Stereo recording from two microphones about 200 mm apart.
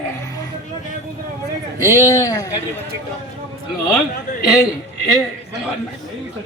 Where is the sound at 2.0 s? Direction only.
15° left (ahead or behind).